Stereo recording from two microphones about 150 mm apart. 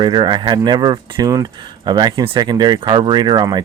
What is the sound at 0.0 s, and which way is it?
Speech, 30° right (ahead or behind).